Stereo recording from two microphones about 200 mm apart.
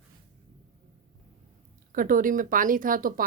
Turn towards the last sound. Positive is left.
turn(degrees=-45)  # may be behind; listen again after turning